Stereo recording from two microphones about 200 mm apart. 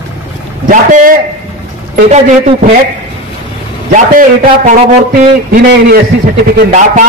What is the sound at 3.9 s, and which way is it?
Speech, 40° right (ahead or behind).